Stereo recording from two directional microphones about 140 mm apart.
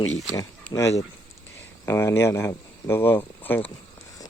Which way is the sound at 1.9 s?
20° left (ahead or behind).